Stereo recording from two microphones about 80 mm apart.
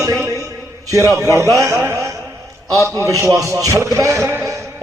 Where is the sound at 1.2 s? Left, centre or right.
Right.